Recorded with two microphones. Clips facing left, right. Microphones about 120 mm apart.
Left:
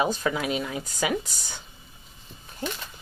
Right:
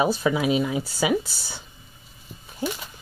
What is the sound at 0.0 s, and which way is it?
Speech, 5° right (ahead or behind).